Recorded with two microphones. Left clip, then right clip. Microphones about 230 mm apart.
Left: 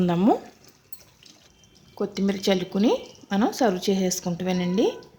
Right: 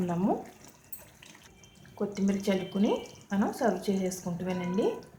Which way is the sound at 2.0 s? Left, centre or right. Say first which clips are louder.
Left 6 dB; left.